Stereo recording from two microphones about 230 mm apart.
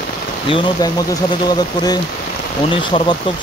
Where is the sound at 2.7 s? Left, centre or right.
Left.